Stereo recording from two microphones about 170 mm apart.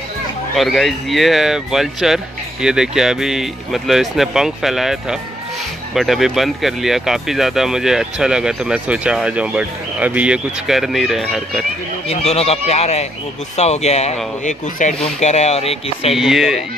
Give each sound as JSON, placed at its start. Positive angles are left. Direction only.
{"t": 0.6, "sound": "speech", "side_deg": 0}
{"t": 5.9, "sound": "speech", "side_deg": 0}
{"t": 12.1, "sound": "speech", "side_deg": 40}
{"t": 16.2, "sound": "speech", "side_deg": 0}